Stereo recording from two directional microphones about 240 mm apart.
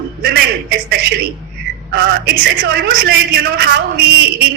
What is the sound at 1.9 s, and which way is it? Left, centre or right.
A man's voice, right.